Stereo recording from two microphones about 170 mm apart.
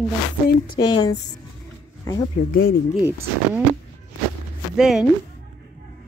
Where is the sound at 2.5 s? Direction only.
65° left (ahead or behind).